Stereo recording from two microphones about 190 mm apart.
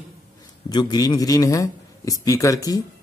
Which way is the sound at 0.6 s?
20° left (ahead or behind).